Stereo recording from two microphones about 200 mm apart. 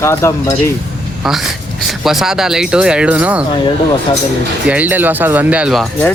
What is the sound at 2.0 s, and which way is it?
Speech, centre (ahead or behind).